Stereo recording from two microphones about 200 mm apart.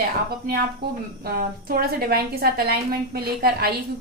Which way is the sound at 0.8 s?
55° right (ahead or behind).